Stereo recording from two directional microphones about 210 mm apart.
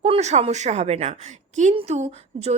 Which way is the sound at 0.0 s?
30° right (ahead or behind).